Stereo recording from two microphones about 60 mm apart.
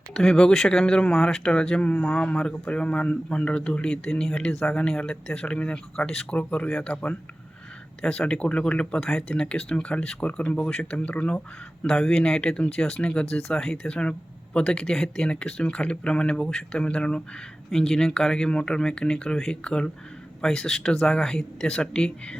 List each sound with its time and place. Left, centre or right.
0.1 s speech: centre
6.7 s speech: centre
8.0 s speech: centre
9.0 s speech: centre
9.3 s speech: centre